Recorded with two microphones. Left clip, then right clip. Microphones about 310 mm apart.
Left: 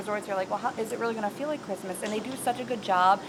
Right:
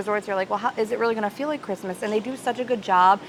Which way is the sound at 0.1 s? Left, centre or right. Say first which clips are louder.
Right 5 dB; right.